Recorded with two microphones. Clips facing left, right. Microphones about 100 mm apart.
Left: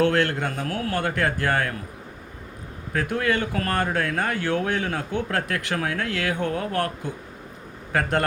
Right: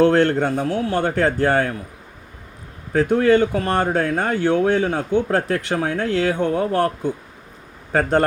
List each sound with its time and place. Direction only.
0.0 s speech: 30° right (ahead or behind)
2.9 s speech: 30° right (ahead or behind)